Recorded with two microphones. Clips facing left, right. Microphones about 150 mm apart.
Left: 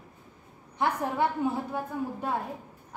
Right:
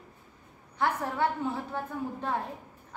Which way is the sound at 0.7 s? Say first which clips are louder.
Left 2 dB; 15° left (ahead or behind).